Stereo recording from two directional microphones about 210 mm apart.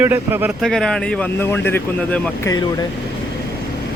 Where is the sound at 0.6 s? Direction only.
Centre (ahead or behind).